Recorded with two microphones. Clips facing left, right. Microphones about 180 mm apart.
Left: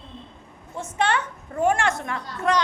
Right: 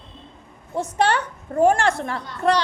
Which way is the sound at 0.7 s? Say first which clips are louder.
Right 4 dB; 35° right (ahead or behind).